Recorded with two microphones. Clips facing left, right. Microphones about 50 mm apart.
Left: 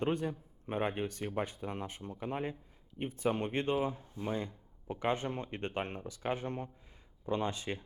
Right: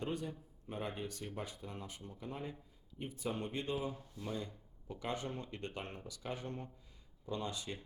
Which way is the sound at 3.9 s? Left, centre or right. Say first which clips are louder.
Left 6 dB; left.